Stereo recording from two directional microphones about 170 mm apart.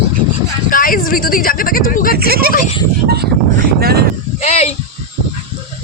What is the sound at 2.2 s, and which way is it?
Speech, 65° right (ahead or behind).